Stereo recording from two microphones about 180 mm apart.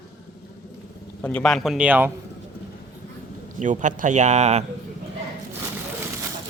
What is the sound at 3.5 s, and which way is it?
A man's voice, 45° right (ahead or behind).